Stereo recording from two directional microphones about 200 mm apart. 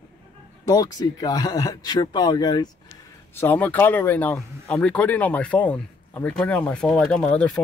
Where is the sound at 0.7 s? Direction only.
20° left (ahead or behind).